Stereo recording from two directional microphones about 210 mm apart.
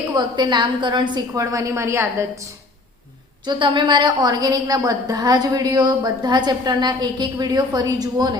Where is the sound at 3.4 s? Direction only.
20° right (ahead or behind).